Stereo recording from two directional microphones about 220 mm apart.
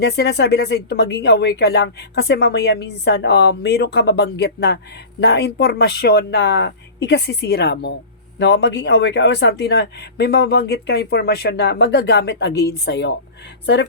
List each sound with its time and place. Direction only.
0.0 s speech: 50° left (ahead or behind)